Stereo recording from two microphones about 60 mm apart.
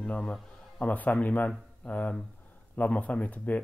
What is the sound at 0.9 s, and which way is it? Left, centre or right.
Speech, left.